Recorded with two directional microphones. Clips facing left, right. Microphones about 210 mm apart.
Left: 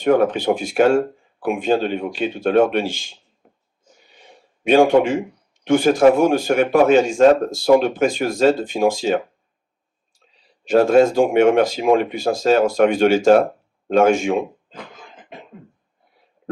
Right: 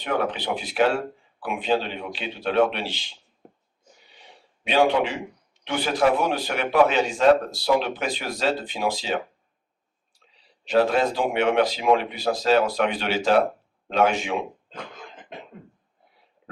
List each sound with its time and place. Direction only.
0.0 s speech: 45° left (ahead or behind)
4.1 s gasp: 45° left (ahead or behind)
5.6 s speech: 45° left (ahead or behind)
10.7 s speech: 45° left (ahead or behind)